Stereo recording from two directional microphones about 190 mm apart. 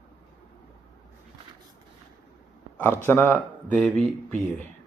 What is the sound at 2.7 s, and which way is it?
Speech, 10° left (ahead or behind).